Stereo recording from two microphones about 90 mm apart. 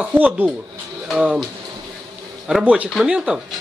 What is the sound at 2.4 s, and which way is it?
Speech, 10° right (ahead or behind).